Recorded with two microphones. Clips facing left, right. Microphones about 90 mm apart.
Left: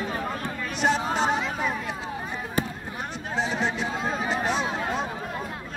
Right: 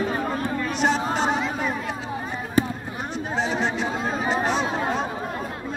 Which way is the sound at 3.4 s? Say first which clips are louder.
Right 2 dB; centre (ahead or behind).